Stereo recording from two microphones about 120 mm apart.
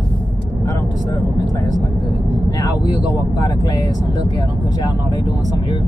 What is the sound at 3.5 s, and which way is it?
Speech, 30° left (ahead or behind).